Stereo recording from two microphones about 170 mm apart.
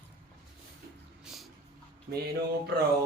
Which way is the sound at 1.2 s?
Centre (ahead or behind).